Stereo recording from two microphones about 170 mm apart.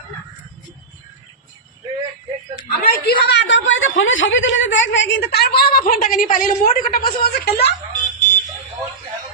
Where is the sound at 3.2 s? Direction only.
90° left.